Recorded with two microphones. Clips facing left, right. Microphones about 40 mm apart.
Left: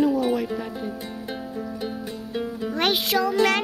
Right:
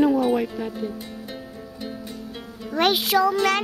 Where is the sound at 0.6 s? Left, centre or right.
Centre.